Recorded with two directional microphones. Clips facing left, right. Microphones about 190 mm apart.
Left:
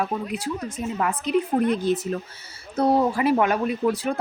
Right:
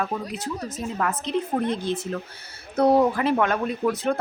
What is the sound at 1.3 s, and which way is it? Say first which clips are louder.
Speech: left 4 dB; 25° right (ahead or behind).